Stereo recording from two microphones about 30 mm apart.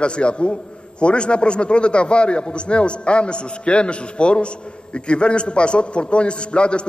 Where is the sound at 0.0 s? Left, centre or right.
Left.